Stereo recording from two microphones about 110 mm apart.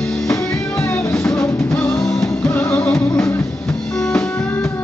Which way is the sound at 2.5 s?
15° left (ahead or behind).